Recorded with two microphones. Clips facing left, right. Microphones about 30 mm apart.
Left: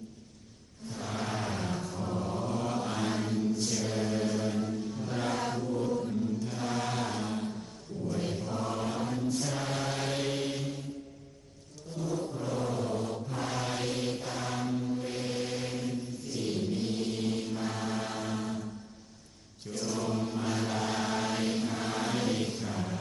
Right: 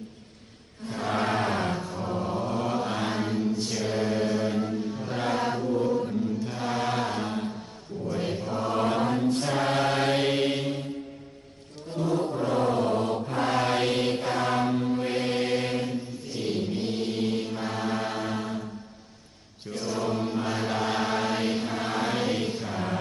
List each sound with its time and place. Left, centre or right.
0.9 s chant: right
1.7 s chant: right
8.7 s chant: right
15.9 s chant: right
19.7 s choir: right